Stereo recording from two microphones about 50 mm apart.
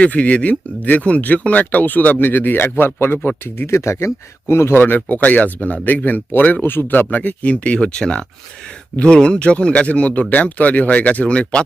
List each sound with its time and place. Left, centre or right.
0.0 s speech: left
3.7 s speech: left
4.8 s speech: left
6.6 s speech: left
7.2 s speech: left